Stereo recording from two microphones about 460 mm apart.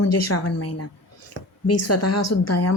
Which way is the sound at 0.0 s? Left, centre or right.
Left.